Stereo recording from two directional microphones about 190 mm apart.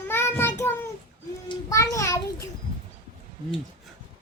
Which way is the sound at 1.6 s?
15° left (ahead or behind).